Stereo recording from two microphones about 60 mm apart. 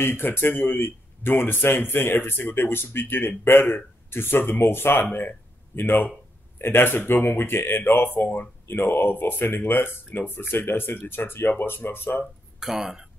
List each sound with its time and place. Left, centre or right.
0.0 s speech: left
12.5 s speech: centre